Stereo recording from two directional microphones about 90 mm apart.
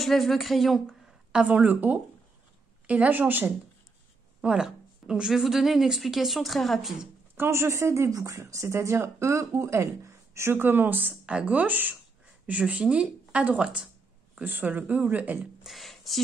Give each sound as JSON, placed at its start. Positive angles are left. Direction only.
{"t": 0.0, "sound": "a woman's voice", "side_deg": 0}
{"t": 4.4, "sound": "speech", "side_deg": -10}
{"t": 7.3, "sound": "speech", "side_deg": -30}
{"t": 15.6, "sound": "a sound", "side_deg": 0}